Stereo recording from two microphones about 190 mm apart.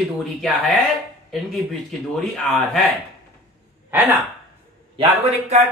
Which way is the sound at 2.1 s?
Centre (ahead or behind).